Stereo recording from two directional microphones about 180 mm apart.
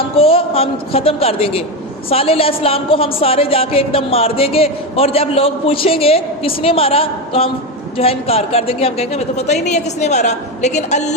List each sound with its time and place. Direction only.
0.2 s a woman's voice: 30° left (ahead or behind)